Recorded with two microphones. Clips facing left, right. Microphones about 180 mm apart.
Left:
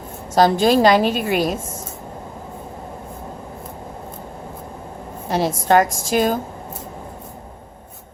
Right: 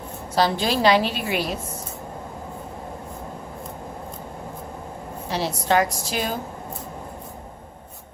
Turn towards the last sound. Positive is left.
turn(degrees=45)  # may be behind; listen again after turning